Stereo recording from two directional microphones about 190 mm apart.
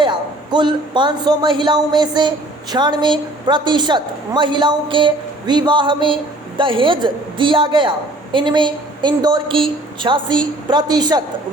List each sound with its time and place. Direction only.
0.0 s a man's voice: 25° right (ahead or behind)